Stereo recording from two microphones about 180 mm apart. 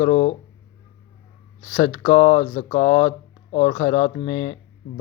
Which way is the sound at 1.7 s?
20° left (ahead or behind).